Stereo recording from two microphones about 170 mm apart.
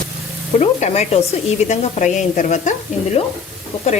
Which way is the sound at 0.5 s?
40° left (ahead or behind).